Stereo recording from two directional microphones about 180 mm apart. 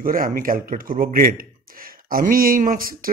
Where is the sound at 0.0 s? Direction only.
50° right (ahead or behind).